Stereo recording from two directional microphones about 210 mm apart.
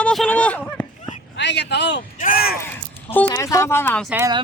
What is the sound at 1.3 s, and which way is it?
Speech, 55° left (ahead or behind).